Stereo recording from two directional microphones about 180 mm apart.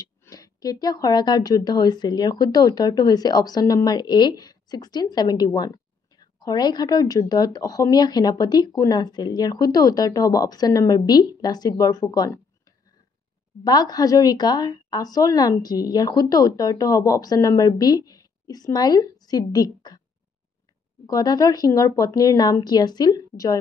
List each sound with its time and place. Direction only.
0.0 s speech: 20° left (ahead or behind)
13.7 s speech: 20° left (ahead or behind)
21.1 s speech: 20° left (ahead or behind)